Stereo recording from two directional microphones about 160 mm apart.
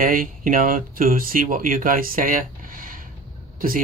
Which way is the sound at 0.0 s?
60° right (ahead or behind).